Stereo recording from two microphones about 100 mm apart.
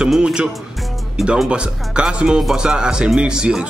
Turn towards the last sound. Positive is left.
turn(degrees=-10)  # may be behind; listen again after turning